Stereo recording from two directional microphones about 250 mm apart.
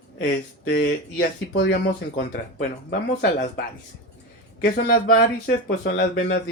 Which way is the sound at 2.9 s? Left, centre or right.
Left.